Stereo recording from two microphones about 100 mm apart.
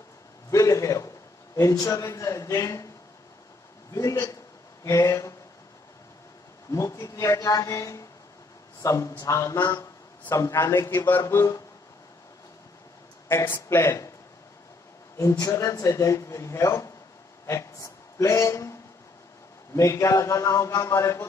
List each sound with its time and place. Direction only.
0.5 s a sound: 30° left (ahead or behind)
1.6 s speech: 35° left (ahead or behind)
3.9 s speech: 30° left (ahead or behind)
6.7 s a man's voice: 30° left (ahead or behind)
13.3 s a man's voice: 25° left (ahead or behind)
15.1 s speech: 35° left (ahead or behind)